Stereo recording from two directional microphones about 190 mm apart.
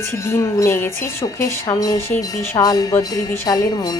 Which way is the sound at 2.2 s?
20° left (ahead or behind).